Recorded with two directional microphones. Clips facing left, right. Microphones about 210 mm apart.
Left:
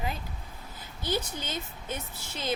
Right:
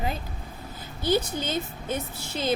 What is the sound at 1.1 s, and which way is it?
A woman's voice, 30° right (ahead or behind).